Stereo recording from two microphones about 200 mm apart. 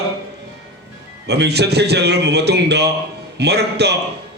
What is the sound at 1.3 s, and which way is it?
A man's voice, 55° right (ahead or behind).